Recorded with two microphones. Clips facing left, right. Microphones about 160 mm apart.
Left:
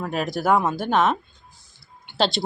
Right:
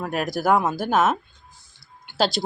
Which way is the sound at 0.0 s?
5° right (ahead or behind).